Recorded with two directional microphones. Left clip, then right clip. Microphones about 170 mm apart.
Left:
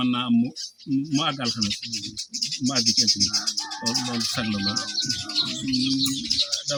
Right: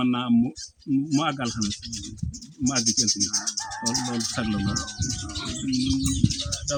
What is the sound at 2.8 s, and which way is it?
Speech, 30° right (ahead or behind).